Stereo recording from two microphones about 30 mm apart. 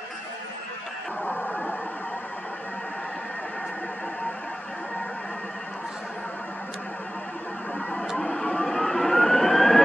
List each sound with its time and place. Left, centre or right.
1.2 s radio: left
8.2 s vehicle: left